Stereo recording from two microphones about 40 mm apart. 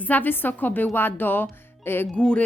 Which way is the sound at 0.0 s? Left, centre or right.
Left.